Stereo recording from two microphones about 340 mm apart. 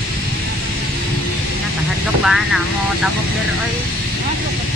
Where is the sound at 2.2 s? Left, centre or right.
Centre.